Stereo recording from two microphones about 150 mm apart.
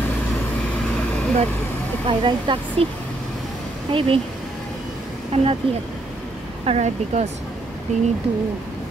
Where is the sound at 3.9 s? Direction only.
40° right (ahead or behind).